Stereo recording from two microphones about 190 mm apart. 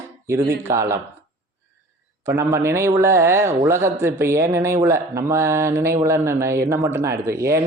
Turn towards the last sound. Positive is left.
turn(degrees=-15)  # may be behind; listen again after turning